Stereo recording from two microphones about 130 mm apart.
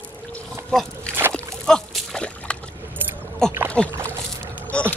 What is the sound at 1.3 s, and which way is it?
Slosh, 10° left (ahead or behind).